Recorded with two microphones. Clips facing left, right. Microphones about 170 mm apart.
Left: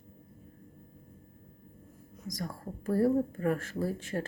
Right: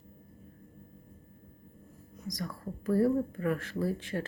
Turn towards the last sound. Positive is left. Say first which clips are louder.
# right 1 dB
turn(degrees=45)  # may be behind; listen again after turning